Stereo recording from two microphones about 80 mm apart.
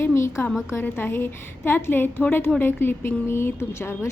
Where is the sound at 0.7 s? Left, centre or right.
Left.